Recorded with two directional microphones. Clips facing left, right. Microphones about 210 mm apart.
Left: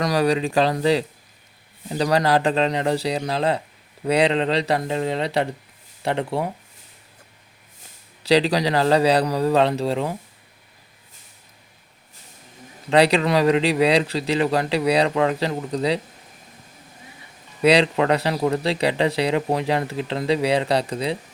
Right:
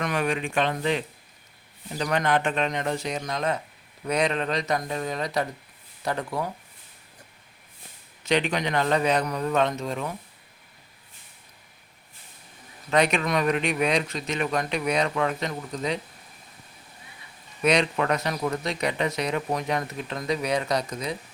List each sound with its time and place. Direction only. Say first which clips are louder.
0.0 s speech: left 7 dB; 35° left (ahead or behind)
8.2 s speech: left 6 dB; 35° left (ahead or behind)
12.9 s speech: left 6 dB; 35° left (ahead or behind)
17.6 s speech: left 6 dB; 30° left (ahead or behind)